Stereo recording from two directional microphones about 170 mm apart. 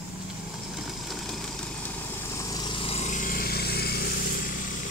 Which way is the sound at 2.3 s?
20° left (ahead or behind).